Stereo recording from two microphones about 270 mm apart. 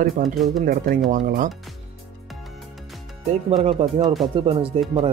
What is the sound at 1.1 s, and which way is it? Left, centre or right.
Speech, right.